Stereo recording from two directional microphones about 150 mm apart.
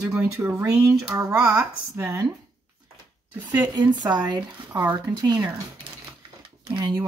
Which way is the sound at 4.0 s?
30° right (ahead or behind).